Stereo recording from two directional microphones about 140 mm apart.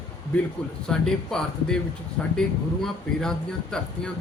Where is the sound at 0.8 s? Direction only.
5° left (ahead or behind).